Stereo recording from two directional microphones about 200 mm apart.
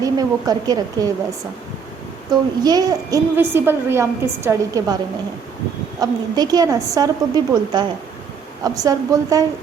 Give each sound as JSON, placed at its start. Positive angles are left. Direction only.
{"t": 0.0, "sound": "a woman's voice", "side_deg": -20}
{"t": 2.3, "sound": "a woman's voice", "side_deg": -20}
{"t": 6.0, "sound": "a woman's voice", "side_deg": -20}